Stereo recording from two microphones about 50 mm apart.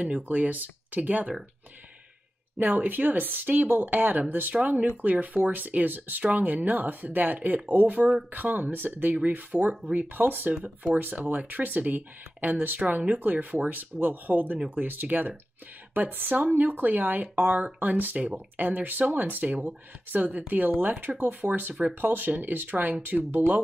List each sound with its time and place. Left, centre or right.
0.0 s speech: right
2.6 s speech: right